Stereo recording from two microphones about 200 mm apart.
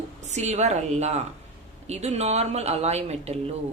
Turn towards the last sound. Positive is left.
turn(degrees=-30)  # may be behind; listen again after turning